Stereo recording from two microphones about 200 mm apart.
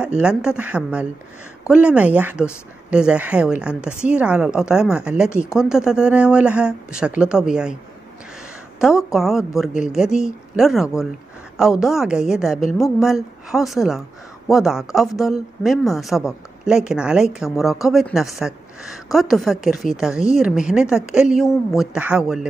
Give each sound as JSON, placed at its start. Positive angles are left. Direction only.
{"t": 0.0, "sound": "a woman's voice", "side_deg": -5}
{"t": 8.8, "sound": "a woman's voice", "side_deg": 0}